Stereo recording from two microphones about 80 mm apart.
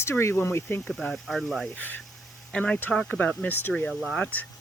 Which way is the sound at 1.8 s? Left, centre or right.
Left.